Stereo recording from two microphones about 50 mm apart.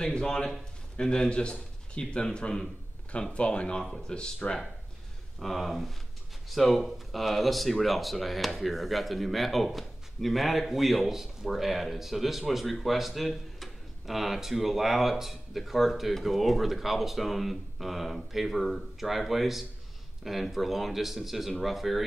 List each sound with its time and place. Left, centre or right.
0.0 s speech: centre
5.4 s speech: centre